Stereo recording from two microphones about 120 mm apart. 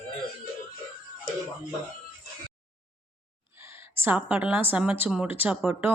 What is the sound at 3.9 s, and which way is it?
A woman's voice, 15° right (ahead or behind).